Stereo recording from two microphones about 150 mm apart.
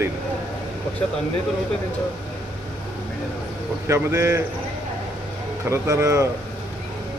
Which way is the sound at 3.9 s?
20° right (ahead or behind).